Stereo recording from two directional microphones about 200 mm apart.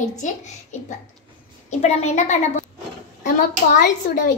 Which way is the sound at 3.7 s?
40° left (ahead or behind).